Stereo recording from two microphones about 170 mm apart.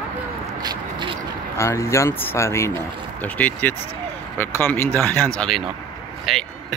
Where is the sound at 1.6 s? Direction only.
15° left (ahead or behind); by 6.4 s centre (ahead or behind).